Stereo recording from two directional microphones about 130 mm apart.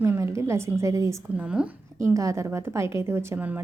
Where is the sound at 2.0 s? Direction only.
25° right (ahead or behind).